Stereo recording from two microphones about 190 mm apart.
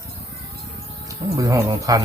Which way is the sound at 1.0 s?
15° right (ahead or behind).